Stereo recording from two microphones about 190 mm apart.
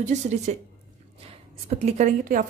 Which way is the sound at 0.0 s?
40° right (ahead or behind).